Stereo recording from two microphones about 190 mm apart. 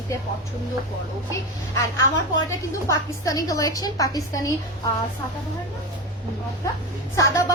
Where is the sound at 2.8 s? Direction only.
20° left (ahead or behind).